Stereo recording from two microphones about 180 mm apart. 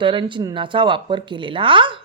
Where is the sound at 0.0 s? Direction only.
25° right (ahead or behind).